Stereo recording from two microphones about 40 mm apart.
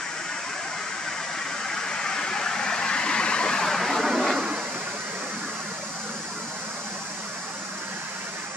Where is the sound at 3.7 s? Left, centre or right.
Centre.